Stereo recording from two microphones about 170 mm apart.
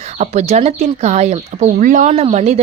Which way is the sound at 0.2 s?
40° right (ahead or behind).